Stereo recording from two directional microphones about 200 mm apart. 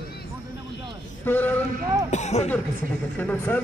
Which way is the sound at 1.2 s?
10° left (ahead or behind).